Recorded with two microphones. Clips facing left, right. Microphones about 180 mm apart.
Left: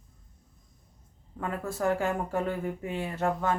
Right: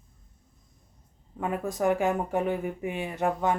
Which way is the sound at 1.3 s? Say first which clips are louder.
Right 3 dB; 15° right (ahead or behind).